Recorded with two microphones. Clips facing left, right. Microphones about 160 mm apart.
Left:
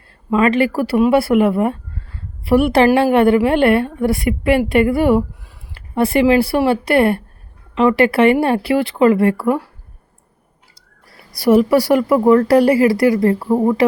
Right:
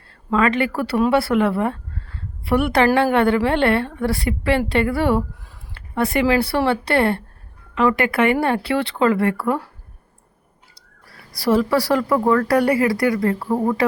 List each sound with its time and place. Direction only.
0.3 s speech: 20° left (ahead or behind)
11.3 s speech: 25° left (ahead or behind)